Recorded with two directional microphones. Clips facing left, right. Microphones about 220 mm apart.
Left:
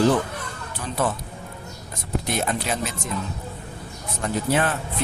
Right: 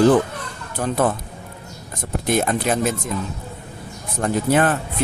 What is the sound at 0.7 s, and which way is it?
Speech, 50° right (ahead or behind).